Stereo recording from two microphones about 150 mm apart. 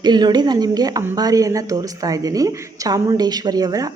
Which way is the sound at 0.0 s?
30° right (ahead or behind).